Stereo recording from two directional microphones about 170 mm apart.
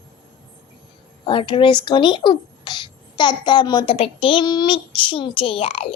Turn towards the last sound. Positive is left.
turn(degrees=30)  # may be behind; listen again after turning